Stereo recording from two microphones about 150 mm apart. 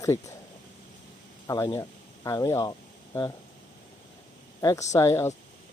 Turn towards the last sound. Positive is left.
turn(degrees=20)  # may be behind; listen again after turning